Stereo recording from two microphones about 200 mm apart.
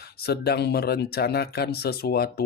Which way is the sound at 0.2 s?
55° left (ahead or behind).